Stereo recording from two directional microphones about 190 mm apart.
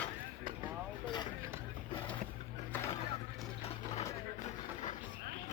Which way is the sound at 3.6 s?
35° left (ahead or behind).